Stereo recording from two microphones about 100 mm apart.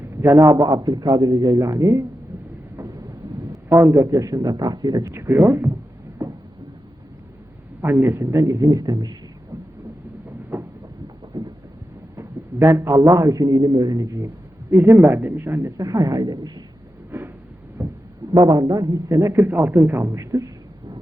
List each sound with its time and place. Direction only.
0.0 s a man's voice: 25° right (ahead or behind)
2.7 s a sound: 30° right (ahead or behind)
3.7 s a man's voice: 25° right (ahead or behind)
5.1 s speech: 25° right (ahead or behind)
6.2 s a sound: 30° right (ahead or behind)
7.8 s a man's voice: 25° right (ahead or behind); by 9.1 s 40° right (ahead or behind)
10.5 s a sound: 25° right (ahead or behind)
12.1 s a man's voice: 30° right (ahead or behind)
14.7 s speech: 25° right (ahead or behind)
15.8 s a woman's voice: 35° right (ahead or behind)
17.1 s a sound: 20° right (ahead or behind)
18.3 s a man's voice: 40° right (ahead or behind)
19.4 s speech: 20° right (ahead or behind)